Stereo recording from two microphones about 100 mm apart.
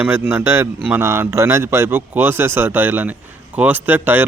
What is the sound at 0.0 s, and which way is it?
A man's voice, 20° right (ahead or behind).